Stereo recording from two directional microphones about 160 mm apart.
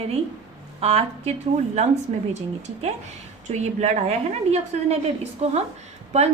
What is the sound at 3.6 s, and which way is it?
A woman's voice, 45° right (ahead or behind).